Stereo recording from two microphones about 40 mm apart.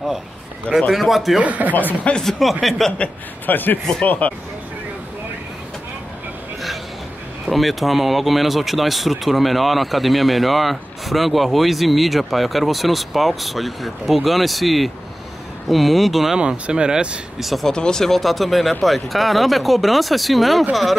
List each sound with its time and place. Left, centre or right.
0.7 s speech: centre
1.4 s speech: right
1.7 s speech: left
2.2 s speech: centre
3.4 s speech: left
4.0 s speech: left
7.4 s speech: centre
16.3 s speech: right
17.4 s speech: centre
17.6 s speech: centre